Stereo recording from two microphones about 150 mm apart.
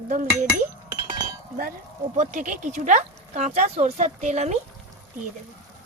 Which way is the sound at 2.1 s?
55° right (ahead or behind).